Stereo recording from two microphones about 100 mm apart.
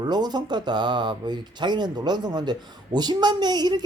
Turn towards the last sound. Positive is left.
turn(degrees=-45)  # may be behind; listen again after turning